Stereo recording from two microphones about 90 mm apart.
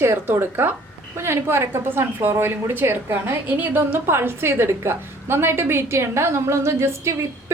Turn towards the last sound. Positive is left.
turn(degrees=-30)  # may be behind; listen again after turning